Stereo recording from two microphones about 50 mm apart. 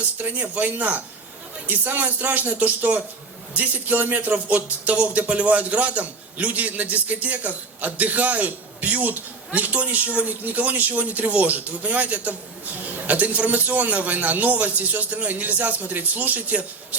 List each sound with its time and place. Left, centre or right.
0.2 s speech: right